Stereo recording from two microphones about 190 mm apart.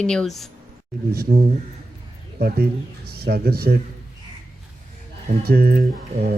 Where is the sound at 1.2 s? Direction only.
50° right (ahead or behind).